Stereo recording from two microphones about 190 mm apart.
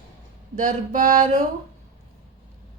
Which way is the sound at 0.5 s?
40° right (ahead or behind).